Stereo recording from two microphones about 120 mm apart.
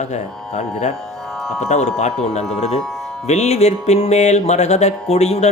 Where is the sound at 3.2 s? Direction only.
70° left (ahead or behind).